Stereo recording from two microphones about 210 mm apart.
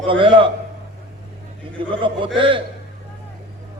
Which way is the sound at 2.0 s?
25° right (ahead or behind).